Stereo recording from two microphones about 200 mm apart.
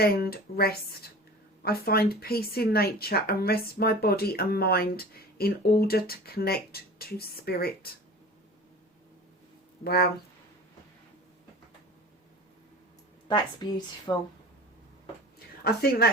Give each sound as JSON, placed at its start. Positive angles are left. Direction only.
{"t": 0.0, "sound": "speech", "side_deg": 50}
{"t": 9.8, "sound": "speech", "side_deg": 50}
{"t": 13.2, "sound": "a woman's voice", "side_deg": 25}
{"t": 15.6, "sound": "speech", "side_deg": 50}